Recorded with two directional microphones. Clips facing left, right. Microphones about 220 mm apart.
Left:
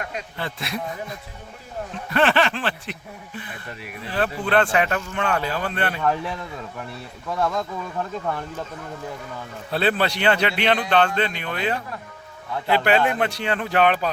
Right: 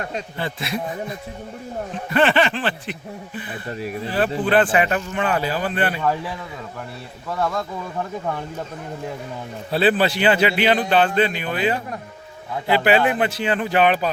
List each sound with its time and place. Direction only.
0.3 s speech: centre (ahead or behind)
2.0 s speech: centre (ahead or behind)
3.7 s speech: 30° right (ahead or behind)
4.4 s speech: 5° right (ahead or behind)
9.7 s speech: 5° right (ahead or behind)